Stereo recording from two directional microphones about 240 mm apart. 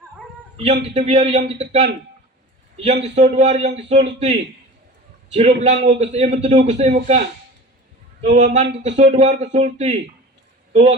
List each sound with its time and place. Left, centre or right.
0.5 s speech: right
3.0 s speech: right
5.3 s speech: right
8.2 s speech: right